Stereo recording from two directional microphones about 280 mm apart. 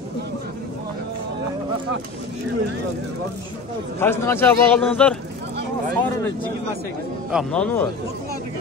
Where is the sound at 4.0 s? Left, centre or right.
Centre.